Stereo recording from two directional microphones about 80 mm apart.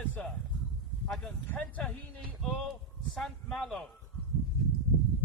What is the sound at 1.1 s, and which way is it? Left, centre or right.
Speech, centre.